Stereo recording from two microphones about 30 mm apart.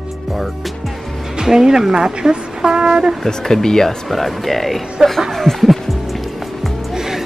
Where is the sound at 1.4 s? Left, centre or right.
Centre.